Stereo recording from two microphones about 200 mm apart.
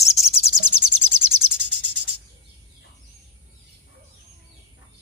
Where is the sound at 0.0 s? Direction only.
30° left (ahead or behind).